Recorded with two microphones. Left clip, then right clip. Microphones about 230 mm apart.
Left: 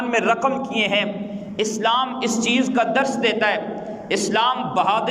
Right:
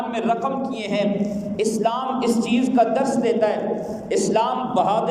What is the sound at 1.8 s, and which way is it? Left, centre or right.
A man's voice, left.